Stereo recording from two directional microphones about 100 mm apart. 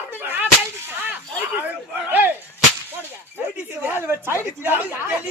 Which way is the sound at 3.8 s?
20° right (ahead or behind).